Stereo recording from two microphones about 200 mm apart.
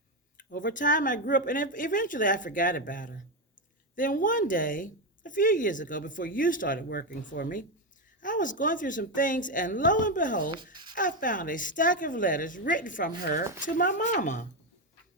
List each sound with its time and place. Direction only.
0.3 s a woman's voice: 40° left (ahead or behind)